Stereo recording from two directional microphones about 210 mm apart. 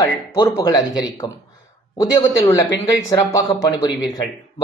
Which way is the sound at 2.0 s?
15° left (ahead or behind).